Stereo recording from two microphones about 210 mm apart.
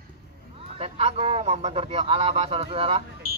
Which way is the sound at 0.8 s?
30° right (ahead or behind).